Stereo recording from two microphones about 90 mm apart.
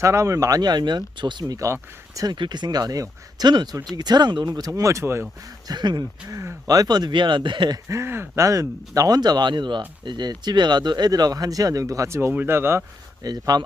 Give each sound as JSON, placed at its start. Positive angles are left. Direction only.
{"t": 0.0, "sound": "speech", "side_deg": -35}
{"t": 1.5, "sound": "speech", "side_deg": -35}
{"t": 2.2, "sound": "speech", "side_deg": -55}
{"t": 4.7, "sound": "speech", "side_deg": -35}
{"t": 5.6, "sound": "speech", "side_deg": -50}
{"t": 7.9, "sound": "speech", "side_deg": -30}
{"t": 13.2, "sound": "speech", "side_deg": -45}